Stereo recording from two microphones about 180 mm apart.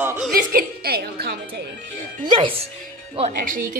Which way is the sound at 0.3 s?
55° right (ahead or behind).